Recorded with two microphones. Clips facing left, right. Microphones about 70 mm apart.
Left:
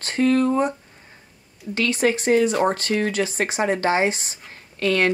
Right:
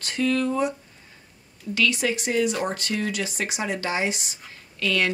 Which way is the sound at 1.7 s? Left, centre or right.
Left.